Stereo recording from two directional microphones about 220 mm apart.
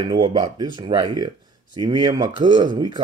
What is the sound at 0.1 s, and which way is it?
Speech, 20° right (ahead or behind).